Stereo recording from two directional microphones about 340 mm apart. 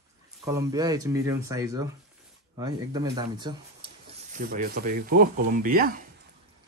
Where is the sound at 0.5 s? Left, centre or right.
Centre.